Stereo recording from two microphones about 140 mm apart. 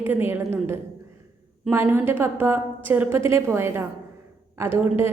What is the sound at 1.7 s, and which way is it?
A woman's voice, 15° right (ahead or behind).